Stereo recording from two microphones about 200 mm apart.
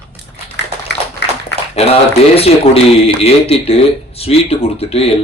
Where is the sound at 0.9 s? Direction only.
60° left (ahead or behind).